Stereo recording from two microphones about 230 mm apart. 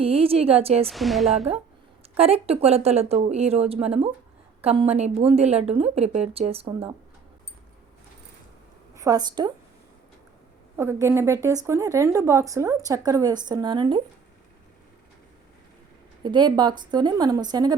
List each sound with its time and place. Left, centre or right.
0.0 s speech: right
0.9 s a woman's voice: centre
2.1 s speech: right
9.0 s a woman's voice: centre
10.8 s speech: centre
16.2 s speech: centre